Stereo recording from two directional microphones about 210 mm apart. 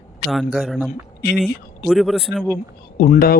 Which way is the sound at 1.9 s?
Centre (ahead or behind).